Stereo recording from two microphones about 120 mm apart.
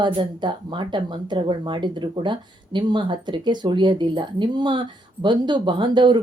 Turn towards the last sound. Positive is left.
turn(degrees=-40)  # may be behind; listen again after turning